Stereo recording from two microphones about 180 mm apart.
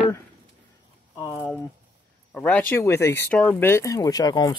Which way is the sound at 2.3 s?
10° left (ahead or behind).